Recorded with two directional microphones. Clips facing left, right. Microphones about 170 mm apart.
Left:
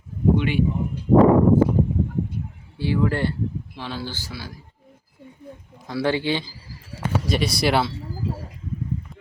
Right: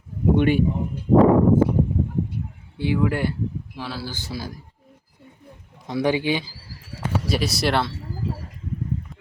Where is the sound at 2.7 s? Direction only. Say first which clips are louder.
Even; 15° right (ahead or behind).